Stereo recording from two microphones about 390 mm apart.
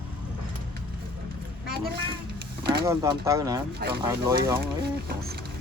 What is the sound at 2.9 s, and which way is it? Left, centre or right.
Speech, centre.